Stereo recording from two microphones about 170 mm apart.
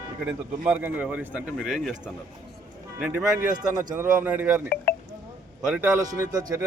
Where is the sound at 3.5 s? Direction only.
25° right (ahead or behind).